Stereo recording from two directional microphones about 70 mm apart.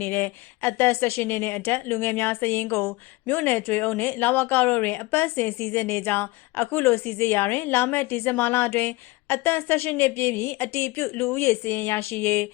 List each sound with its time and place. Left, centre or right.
0.0 s a woman's voice: left